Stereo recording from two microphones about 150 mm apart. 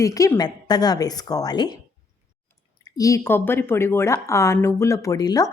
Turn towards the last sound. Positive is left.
turn(degrees=25)  # may be behind; listen again after turning